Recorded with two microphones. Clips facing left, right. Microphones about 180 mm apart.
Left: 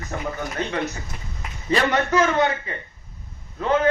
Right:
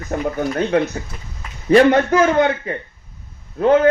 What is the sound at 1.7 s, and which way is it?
A man's voice, 55° right (ahead or behind).